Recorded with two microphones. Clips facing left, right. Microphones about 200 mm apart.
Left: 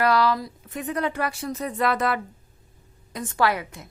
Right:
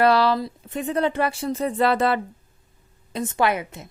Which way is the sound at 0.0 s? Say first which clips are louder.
Right 3 dB; 30° right (ahead or behind).